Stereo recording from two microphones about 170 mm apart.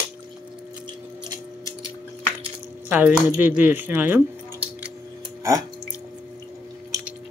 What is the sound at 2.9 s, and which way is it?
Speech, 10° right (ahead or behind).